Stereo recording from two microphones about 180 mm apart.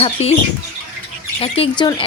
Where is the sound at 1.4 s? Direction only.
30° left (ahead or behind).